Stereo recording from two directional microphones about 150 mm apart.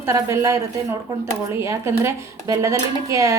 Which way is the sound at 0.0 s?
20° right (ahead or behind).